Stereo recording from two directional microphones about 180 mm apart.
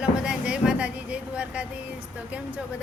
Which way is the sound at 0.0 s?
5° right (ahead or behind).